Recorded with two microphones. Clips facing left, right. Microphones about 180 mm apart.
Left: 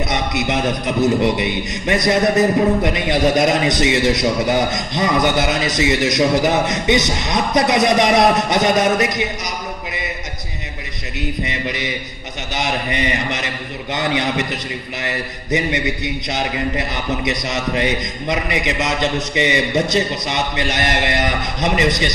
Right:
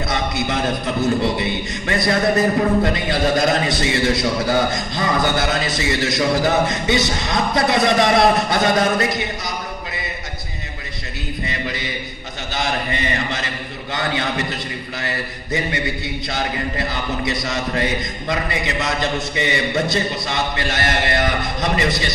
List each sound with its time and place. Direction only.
0.1 s a man's voice: 20° left (ahead or behind)
11.1 s a sound: 20° left (ahead or behind)
12.5 s a man's voice: 20° left (ahead or behind)